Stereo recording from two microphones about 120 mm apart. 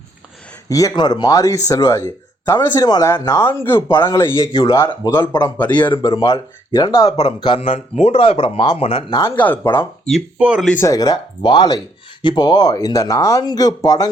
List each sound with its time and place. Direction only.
0.7 s speech: 30° left (ahead or behind)
3.1 s speech: 20° left (ahead or behind)
4.4 s speech: 35° left (ahead or behind)
5.4 s speech: 15° left (ahead or behind)
6.0 s speech: 25° left (ahead or behind)
7.7 s speech: 60° left (ahead or behind)
9.4 s speech: 15° left (ahead or behind)
10.3 s speech: 10° right (ahead or behind)
10.8 s speech: 30° left (ahead or behind)